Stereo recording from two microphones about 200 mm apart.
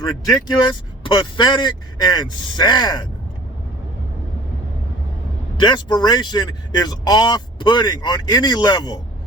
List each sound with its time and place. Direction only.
0.0 s speech: 20° left (ahead or behind)
5.5 s speech: 20° left (ahead or behind)